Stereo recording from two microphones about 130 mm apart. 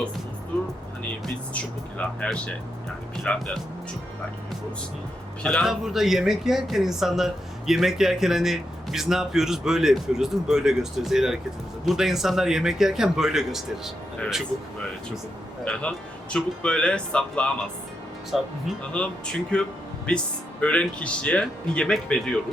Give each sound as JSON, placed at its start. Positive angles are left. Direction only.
{"t": 1.2, "sound": "speech", "side_deg": 10}
{"t": 5.4, "sound": "speech", "side_deg": 5}
{"t": 15.6, "sound": "speech", "side_deg": 5}